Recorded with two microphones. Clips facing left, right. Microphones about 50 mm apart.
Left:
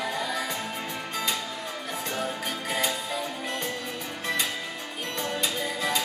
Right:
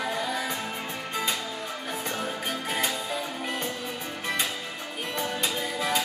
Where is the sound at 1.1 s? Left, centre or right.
Centre.